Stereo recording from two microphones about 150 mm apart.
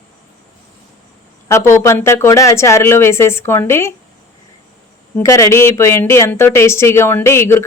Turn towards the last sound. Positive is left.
turn(degrees=15)  # may be behind; listen again after turning